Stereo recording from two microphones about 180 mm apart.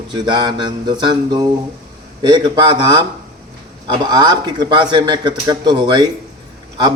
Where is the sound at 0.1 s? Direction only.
25° right (ahead or behind).